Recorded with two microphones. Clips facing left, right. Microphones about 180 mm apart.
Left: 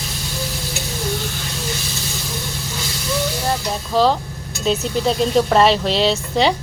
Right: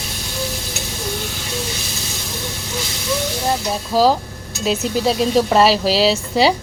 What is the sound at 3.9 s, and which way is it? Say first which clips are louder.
Speech: right 1 dB; 5° right (ahead or behind).